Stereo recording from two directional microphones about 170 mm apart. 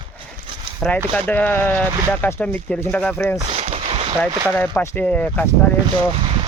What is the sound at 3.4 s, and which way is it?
Boat, 35° right (ahead or behind).